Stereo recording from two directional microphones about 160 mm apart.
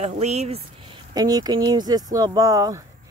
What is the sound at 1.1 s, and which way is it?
Speech, 25° right (ahead or behind).